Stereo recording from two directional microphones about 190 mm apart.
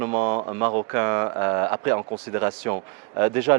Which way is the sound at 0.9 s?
15° right (ahead or behind).